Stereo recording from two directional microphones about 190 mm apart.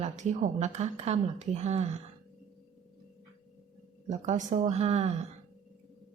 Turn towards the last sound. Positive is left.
turn(degrees=-35)  # may be behind; listen again after turning